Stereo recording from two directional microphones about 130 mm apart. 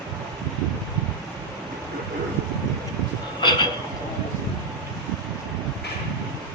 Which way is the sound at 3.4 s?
35° left (ahead or behind).